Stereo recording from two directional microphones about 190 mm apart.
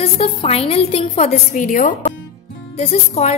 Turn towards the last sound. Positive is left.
turn(degrees=35)  # may be behind; listen again after turning